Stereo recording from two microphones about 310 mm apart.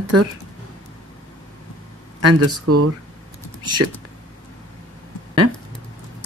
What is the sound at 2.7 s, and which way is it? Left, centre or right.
Speech, right.